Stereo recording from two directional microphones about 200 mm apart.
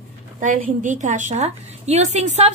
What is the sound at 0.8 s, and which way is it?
A woman's voice, 40° right (ahead or behind).